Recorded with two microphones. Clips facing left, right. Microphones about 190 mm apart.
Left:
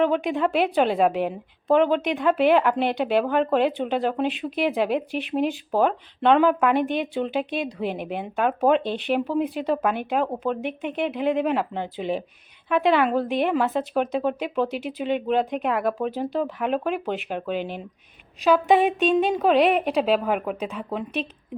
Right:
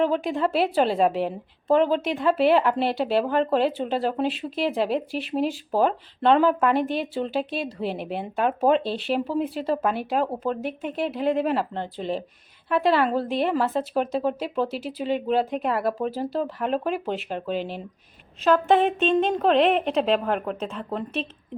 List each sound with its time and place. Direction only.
0.0 s a woman's voice: centre (ahead or behind)
8.8 s speech: 35° right (ahead or behind)
9.0 s a woman's voice: centre (ahead or behind)